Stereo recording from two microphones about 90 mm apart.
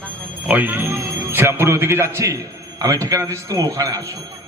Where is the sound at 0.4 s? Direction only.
20° right (ahead or behind).